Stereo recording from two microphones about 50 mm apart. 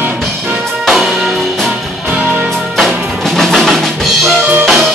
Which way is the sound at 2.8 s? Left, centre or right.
Centre.